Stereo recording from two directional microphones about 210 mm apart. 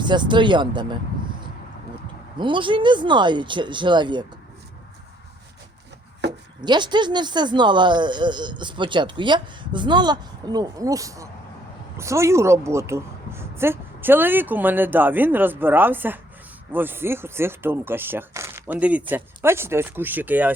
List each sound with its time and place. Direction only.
0.0 s speech: 20° right (ahead or behind)
2.4 s speech: 25° right (ahead or behind)
6.2 s chopping: 55° right (ahead or behind)
6.6 s a woman's voice: 20° right (ahead or behind)